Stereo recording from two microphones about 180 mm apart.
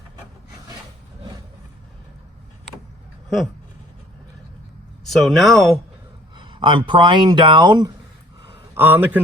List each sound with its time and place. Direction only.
3.2 s speech: centre (ahead or behind)
5.0 s speech: centre (ahead or behind)
6.3 s speech: 25° right (ahead or behind)
8.7 s a man's voice: 10° right (ahead or behind)